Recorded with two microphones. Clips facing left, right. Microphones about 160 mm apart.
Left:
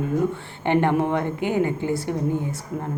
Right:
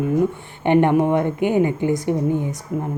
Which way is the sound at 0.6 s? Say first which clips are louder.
Right 4 dB; 20° right (ahead or behind).